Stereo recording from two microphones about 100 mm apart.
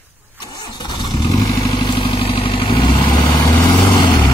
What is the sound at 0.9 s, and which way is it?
Vehicle, 50° left (ahead or behind).